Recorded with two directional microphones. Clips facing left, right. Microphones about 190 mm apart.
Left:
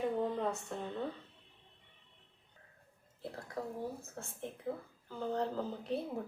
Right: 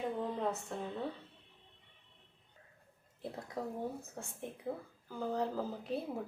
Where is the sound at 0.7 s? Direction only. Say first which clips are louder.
Even; centre (ahead or behind).